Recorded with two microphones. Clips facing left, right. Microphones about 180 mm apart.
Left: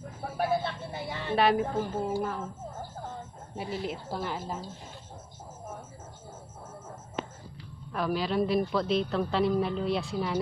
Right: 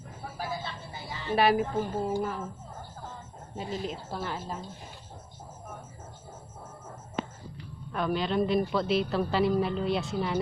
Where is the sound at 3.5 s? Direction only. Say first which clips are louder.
Even; 15° left (ahead or behind).